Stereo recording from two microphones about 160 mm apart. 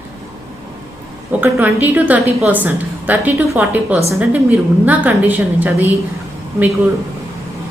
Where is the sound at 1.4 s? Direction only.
10° right (ahead or behind).